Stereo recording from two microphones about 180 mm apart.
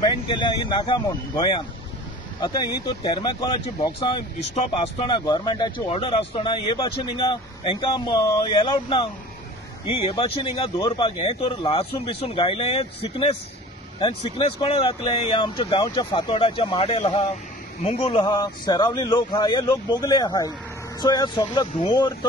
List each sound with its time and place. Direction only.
0.0 s speech: 25° left (ahead or behind)